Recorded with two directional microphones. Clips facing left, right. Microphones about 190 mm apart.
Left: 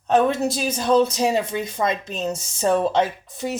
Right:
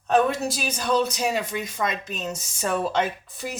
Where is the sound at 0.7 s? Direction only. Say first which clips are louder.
Left 6 dB; 30° left (ahead or behind).